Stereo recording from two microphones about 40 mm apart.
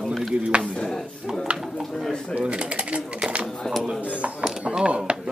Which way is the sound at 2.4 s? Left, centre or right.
Right.